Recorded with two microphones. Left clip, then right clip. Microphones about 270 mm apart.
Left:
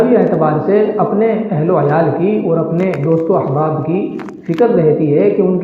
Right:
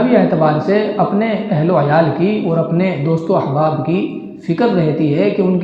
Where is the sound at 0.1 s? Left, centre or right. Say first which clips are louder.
Left 1 dB; right.